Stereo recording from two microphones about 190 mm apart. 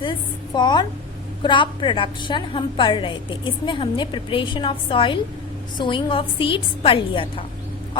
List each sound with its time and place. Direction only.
0.0 s a woman's voice: 25° left (ahead or behind)